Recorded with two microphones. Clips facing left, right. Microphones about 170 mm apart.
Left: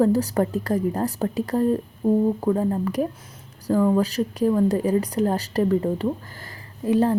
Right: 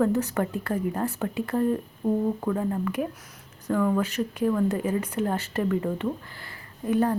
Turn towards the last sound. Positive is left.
turn(degrees=30)  # may be behind; listen again after turning